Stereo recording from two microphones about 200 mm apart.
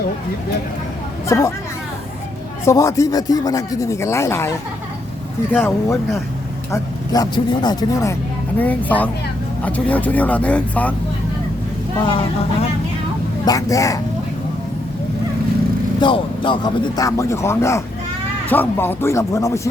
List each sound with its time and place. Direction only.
1.3 s a man's voice: 15° left (ahead or behind)
2.6 s a man's voice: 15° left (ahead or behind)
11.9 s a man's voice: 25° left (ahead or behind)
13.4 s a man's voice: 15° left (ahead or behind)
16.0 s a man's voice: 25° left (ahead or behind)